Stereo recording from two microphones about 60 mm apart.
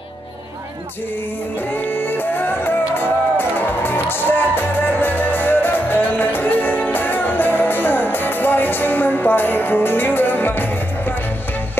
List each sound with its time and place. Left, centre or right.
1.7 s music: left